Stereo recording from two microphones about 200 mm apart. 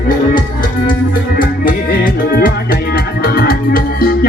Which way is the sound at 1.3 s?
45° left (ahead or behind).